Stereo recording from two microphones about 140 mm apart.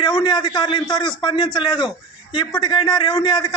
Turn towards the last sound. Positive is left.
turn(degrees=35)  # may be behind; listen again after turning